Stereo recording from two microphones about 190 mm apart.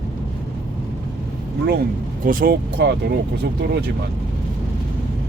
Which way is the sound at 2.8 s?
65° right (ahead or behind).